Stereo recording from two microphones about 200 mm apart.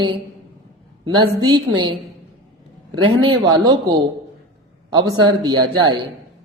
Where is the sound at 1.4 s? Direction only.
20° right (ahead or behind).